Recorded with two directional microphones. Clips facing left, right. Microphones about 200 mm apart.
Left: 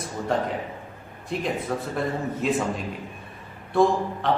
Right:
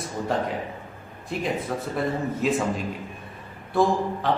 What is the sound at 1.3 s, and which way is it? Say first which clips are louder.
A man's voice: even; centre (ahead or behind).